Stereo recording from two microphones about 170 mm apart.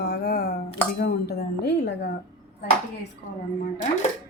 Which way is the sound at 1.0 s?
75° left (ahead or behind).